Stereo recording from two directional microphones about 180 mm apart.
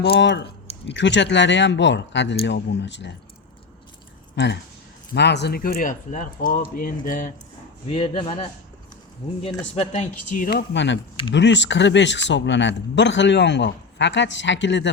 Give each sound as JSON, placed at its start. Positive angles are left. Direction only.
{"t": 0.0, "sound": "a man's voice", "side_deg": 70}
{"t": 4.4, "sound": "speech", "side_deg": 75}
{"t": 7.9, "sound": "a man's voice", "side_deg": 30}
{"t": 9.7, "sound": "speech", "side_deg": 40}
{"t": 10.8, "sound": "a man's voice", "side_deg": 80}